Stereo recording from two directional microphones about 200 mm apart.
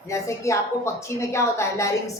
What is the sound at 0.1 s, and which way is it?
A woman's voice, 15° left (ahead or behind).